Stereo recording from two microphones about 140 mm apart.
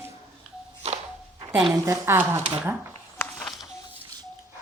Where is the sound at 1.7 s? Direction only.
20° right (ahead or behind).